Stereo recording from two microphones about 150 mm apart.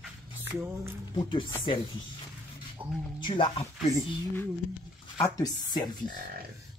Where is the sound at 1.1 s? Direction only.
30° left (ahead or behind).